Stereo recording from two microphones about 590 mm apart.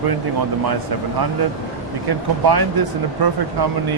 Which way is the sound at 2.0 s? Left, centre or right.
Right.